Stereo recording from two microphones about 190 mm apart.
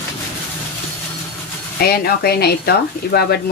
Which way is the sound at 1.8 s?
55° left (ahead or behind).